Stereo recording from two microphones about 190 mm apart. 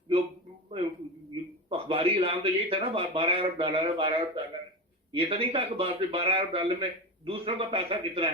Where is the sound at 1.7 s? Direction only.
30° right (ahead or behind).